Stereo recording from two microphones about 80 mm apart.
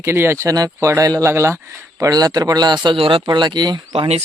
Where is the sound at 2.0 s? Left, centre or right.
Right.